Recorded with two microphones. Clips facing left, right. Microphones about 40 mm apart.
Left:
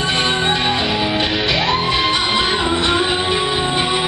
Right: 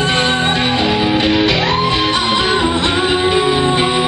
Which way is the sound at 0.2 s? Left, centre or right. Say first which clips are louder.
Right 2 dB; centre.